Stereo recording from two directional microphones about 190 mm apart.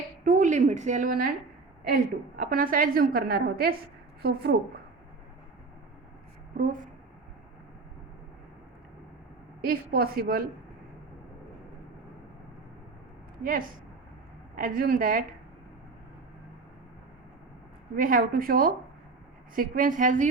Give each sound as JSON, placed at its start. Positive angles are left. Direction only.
{"t": 0.3, "sound": "a woman's voice", "side_deg": -45}
{"t": 2.3, "sound": "a woman's voice", "side_deg": -50}
{"t": 9.6, "sound": "a woman's voice", "side_deg": -50}
{"t": 13.4, "sound": "a woman's voice", "side_deg": -50}
{"t": 17.9, "sound": "a woman's voice", "side_deg": -50}